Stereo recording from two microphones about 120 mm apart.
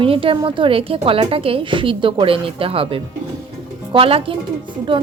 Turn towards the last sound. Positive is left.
turn(degrees=-45)  # may be behind; listen again after turning